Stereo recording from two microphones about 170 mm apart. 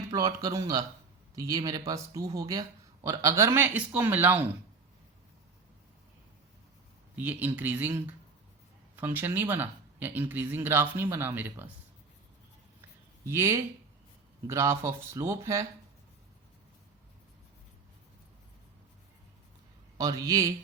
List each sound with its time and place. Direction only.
0.1 s speech: 20° right (ahead or behind)
7.2 s speech: 10° right (ahead or behind)
13.2 s speech: 15° right (ahead or behind)
20.0 s speech: 20° right (ahead or behind)